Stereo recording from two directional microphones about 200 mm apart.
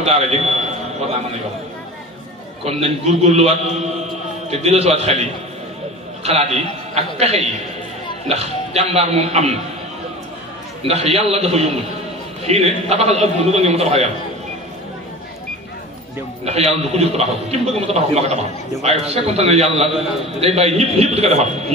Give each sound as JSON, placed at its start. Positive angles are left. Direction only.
{"t": 0.0, "sound": "a man's voice", "side_deg": -30}
{"t": 2.6, "sound": "a man's voice", "side_deg": -30}
{"t": 10.9, "sound": "a man's voice", "side_deg": -30}
{"t": 16.4, "sound": "a man's voice", "side_deg": -30}